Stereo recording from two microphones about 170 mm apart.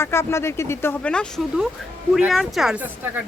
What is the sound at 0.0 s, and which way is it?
A woman's voice, 15° left (ahead or behind).